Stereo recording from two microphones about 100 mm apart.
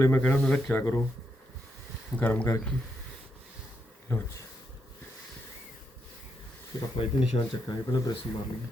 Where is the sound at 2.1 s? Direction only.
15° left (ahead or behind).